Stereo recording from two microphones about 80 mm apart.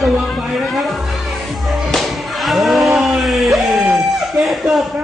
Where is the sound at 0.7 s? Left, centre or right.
Centre.